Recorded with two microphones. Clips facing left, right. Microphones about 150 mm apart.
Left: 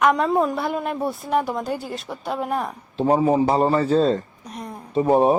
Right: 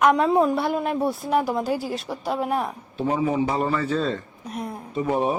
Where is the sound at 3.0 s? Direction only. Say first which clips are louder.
Left 5 dB; 35° left (ahead or behind).